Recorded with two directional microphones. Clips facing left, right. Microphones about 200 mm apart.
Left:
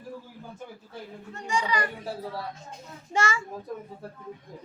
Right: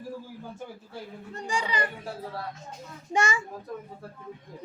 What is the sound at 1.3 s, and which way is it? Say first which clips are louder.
Speech: left 2 dB; 35° right (ahead or behind).